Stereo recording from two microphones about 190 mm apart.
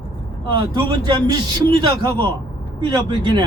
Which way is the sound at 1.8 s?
25° right (ahead or behind).